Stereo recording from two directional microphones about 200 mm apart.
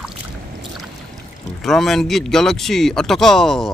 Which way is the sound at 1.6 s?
Centre (ahead or behind).